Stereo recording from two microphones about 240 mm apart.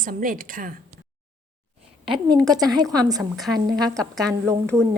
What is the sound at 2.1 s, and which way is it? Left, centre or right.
A woman's voice, centre.